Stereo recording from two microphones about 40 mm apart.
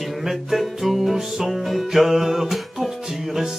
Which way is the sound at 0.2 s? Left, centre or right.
Centre.